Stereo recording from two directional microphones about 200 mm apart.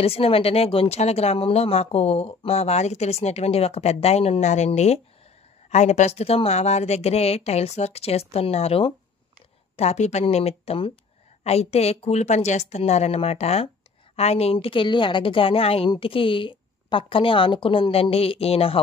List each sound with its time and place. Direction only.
0.0 s a woman's voice: 30° left (ahead or behind)